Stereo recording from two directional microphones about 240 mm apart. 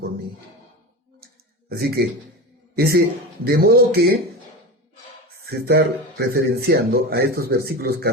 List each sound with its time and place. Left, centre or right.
1.7 s a man's voice: right
5.5 s speech: right